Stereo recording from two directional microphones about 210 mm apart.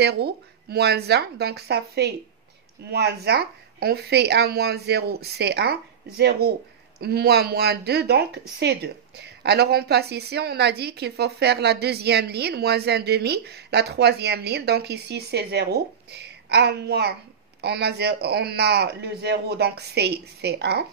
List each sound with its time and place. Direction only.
0.0 s speech: 50° right (ahead or behind)